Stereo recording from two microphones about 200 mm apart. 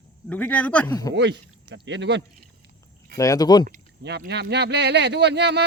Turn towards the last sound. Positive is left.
turn(degrees=-55)  # may be behind; listen again after turning